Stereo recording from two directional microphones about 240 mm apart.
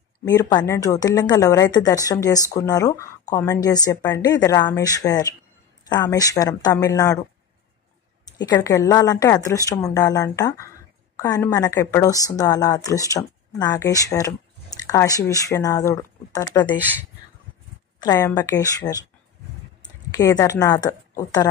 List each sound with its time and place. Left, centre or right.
0.2 s a woman's voice: centre
8.5 s a woman's voice: centre
18.0 s a woman's voice: centre
20.1 s a woman's voice: centre